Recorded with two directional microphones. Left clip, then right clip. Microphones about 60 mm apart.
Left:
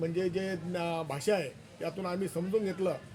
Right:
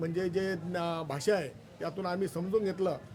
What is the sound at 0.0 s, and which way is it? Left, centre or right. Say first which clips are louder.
Speech: left 1 dB; right.